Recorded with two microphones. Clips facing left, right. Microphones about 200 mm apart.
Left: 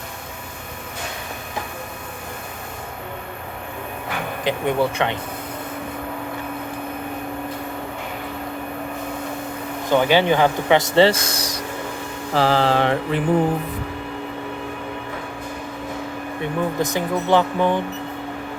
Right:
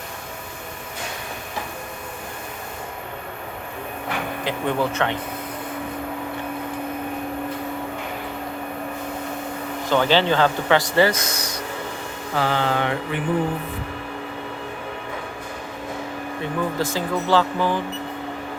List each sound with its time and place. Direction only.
4.4 s speech: 15° left (ahead or behind)
9.9 s speech: 15° left (ahead or behind); by 11.5 s 35° left (ahead or behind)
12.3 s mantra: 35° left (ahead or behind)
16.4 s speech: 20° left (ahead or behind)